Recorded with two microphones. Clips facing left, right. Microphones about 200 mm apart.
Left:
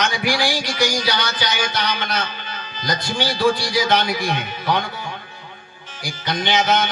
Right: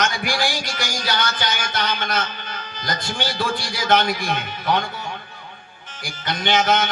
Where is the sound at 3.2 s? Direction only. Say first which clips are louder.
Left 7 dB; 60° left (ahead or behind).